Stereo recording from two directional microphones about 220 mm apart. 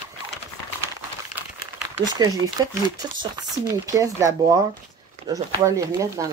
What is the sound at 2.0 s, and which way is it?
Speech, 15° right (ahead or behind).